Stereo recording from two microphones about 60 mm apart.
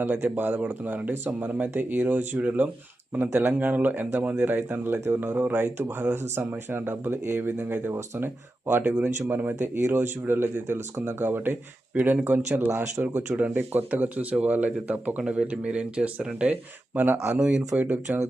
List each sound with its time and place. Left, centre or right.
0.0 s speech: right
8.2 s speech: right
12.6 s speech: right
13.0 s speech: right
17.3 s speech: centre